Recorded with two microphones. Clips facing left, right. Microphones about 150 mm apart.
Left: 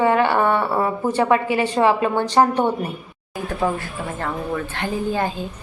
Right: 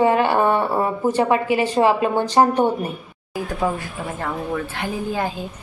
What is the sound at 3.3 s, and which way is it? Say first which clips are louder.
Speech: even; 5° right (ahead or behind).